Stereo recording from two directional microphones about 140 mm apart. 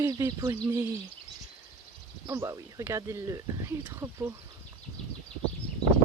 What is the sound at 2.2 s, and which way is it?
Speech, 20° right (ahead or behind).